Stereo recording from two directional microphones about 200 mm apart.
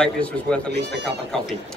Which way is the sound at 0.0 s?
5° left (ahead or behind).